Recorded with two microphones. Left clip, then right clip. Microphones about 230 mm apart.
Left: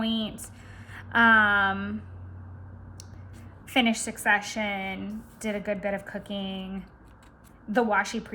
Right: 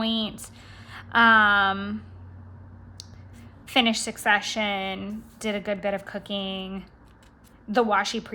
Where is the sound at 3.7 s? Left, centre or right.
Centre.